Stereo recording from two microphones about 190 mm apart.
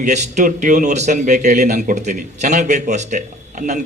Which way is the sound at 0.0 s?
40° right (ahead or behind).